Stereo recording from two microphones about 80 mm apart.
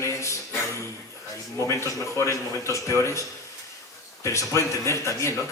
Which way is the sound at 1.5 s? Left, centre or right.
Left.